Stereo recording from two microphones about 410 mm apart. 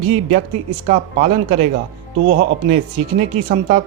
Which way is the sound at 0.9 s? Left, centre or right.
Centre.